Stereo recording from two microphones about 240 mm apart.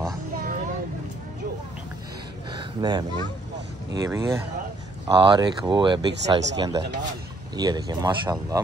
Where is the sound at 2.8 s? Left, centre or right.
Centre.